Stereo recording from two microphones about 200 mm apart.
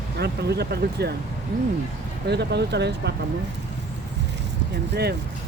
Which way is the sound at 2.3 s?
55° right (ahead or behind).